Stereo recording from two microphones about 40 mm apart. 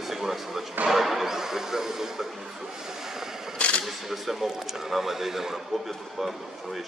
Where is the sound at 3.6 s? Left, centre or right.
Left.